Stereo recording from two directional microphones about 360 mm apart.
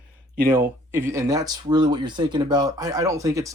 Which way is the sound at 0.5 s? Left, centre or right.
Centre.